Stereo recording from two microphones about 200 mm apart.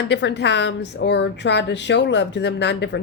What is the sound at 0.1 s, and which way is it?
A woman's voice, 60° left (ahead or behind).